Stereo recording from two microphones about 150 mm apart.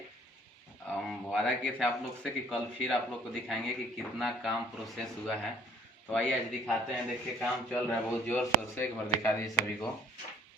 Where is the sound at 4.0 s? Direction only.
Centre (ahead or behind).